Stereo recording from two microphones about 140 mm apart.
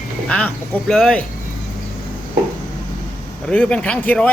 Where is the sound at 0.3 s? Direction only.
10° left (ahead or behind).